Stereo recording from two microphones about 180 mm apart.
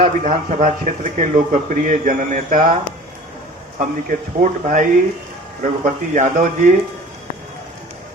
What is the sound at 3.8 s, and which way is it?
Speech, 45° right (ahead or behind).